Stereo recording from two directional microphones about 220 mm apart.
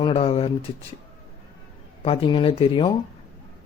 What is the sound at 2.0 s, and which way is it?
Speech, 25° left (ahead or behind).